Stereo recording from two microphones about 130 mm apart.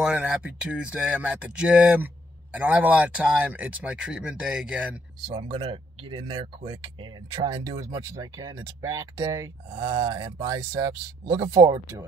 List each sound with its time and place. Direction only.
0.0 s speech: 10° right (ahead or behind)
5.3 s speech: 40° right (ahead or behind); by 9.5 s 25° right (ahead or behind)
9.8 s speech: 40° right (ahead or behind)
10.8 s speech: 20° right (ahead or behind)